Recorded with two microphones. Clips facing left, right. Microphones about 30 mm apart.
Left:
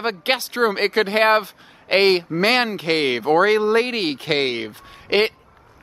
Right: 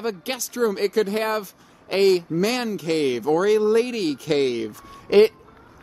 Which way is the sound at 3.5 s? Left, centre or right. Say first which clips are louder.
Left 1 dB; left.